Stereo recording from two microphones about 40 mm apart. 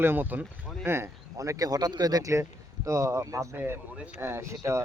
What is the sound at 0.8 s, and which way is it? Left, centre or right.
Speech, right.